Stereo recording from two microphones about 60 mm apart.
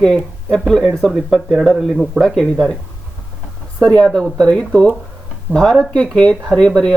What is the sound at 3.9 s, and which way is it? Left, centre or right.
Speech, centre.